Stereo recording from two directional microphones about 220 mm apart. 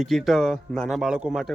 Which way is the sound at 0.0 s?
Centre (ahead or behind).